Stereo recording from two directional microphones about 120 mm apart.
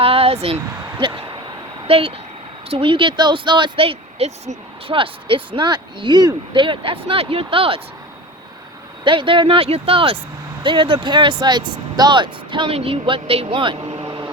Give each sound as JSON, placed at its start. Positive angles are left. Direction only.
{"t": 0.0, "sound": "a sound", "side_deg": -55}
{"t": 0.4, "sound": "speech", "side_deg": -50}
{"t": 9.0, "sound": "speech", "side_deg": -45}